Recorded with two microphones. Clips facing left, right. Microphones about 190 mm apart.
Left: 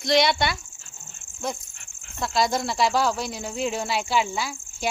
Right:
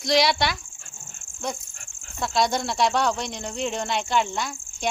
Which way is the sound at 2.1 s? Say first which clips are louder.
Even; centre (ahead or behind).